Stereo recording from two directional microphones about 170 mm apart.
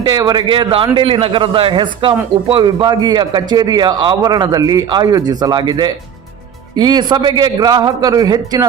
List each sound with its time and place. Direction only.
0.0 s a man's voice: 25° right (ahead or behind)